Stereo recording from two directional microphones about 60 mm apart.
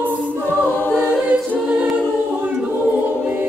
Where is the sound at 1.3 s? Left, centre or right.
Right.